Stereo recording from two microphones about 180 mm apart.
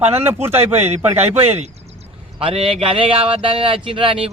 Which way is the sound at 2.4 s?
30° right (ahead or behind).